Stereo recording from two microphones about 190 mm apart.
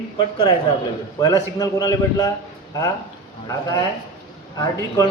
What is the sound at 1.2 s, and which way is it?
A man's voice, 20° left (ahead or behind).